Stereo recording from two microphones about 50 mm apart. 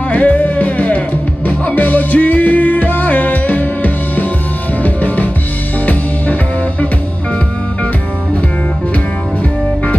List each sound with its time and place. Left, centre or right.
0.1 s music: left